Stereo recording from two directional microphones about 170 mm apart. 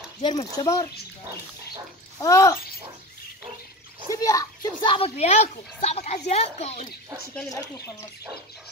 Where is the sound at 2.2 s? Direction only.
20° left (ahead or behind).